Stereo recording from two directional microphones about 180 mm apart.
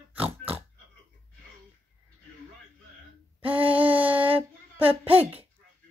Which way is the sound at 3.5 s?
10° right (ahead or behind).